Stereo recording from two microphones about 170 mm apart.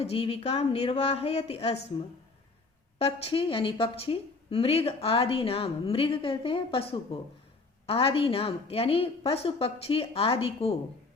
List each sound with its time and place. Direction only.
0.0 s a woman's voice: 35° left (ahead or behind)
3.0 s a woman's voice: 35° left (ahead or behind)